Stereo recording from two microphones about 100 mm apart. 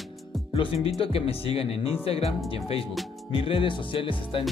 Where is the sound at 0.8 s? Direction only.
70° left (ahead or behind).